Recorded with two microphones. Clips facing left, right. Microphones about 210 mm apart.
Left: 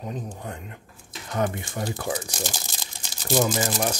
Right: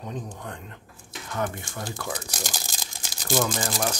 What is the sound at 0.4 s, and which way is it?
Speech, 10° left (ahead or behind).